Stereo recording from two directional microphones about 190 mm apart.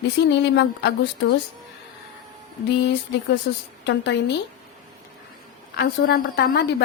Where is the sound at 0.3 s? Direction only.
65° left (ahead or behind).